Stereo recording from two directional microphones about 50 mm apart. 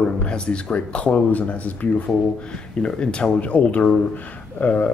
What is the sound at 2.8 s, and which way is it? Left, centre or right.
Speech, centre.